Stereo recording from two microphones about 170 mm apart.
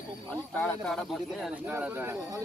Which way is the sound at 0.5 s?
5° left (ahead or behind).